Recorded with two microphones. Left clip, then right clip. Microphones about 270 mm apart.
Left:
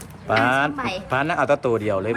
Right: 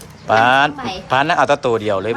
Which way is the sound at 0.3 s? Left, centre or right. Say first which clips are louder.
Right 7 dB; centre.